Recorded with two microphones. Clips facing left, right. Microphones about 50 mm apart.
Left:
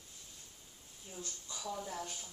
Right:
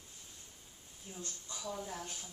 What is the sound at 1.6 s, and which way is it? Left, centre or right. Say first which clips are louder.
Speech: left 1 dB; centre.